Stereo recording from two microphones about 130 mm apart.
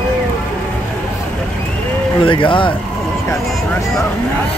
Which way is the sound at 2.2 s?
40° left (ahead or behind).